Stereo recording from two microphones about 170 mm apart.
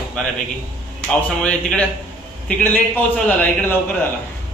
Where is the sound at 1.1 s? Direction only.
5° left (ahead or behind).